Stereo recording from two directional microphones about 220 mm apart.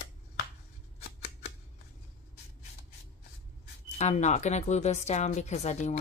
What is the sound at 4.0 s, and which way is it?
Speech, 30° left (ahead or behind).